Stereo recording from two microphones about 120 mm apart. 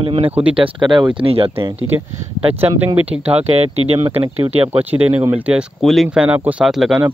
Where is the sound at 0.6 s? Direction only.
40° right (ahead or behind).